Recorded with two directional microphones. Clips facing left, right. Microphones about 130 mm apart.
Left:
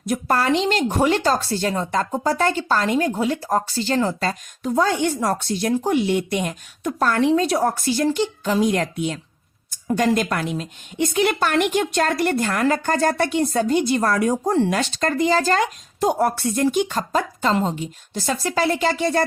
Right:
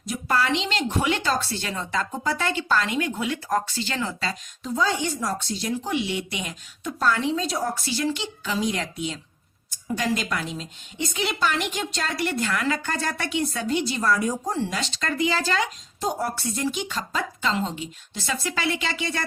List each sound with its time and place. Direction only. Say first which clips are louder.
0.0 s speech: left 4 dB; 50° left (ahead or behind)
16.0 s speech: left 8 dB; 60° left (ahead or behind); by 19.2 s 45° left (ahead or behind)